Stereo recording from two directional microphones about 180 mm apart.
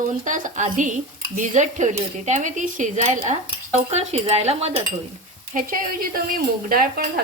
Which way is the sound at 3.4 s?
35° right (ahead or behind).